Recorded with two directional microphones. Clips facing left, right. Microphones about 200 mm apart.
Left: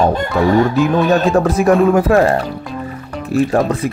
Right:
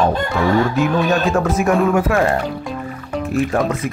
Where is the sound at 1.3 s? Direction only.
35° left (ahead or behind).